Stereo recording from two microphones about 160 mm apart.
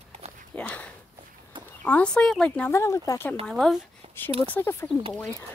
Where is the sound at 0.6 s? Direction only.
10° left (ahead or behind).